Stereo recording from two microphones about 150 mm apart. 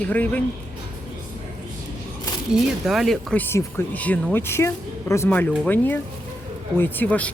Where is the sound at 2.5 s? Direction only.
Centre (ahead or behind).